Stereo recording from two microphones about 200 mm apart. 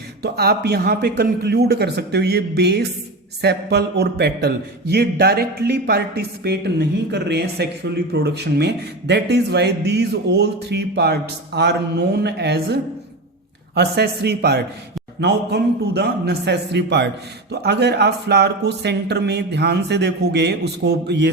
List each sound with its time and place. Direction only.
0.2 s a man's voice: 55° right (ahead or behind)